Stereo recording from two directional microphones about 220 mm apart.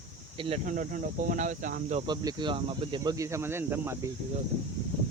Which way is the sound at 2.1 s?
20° right (ahead or behind).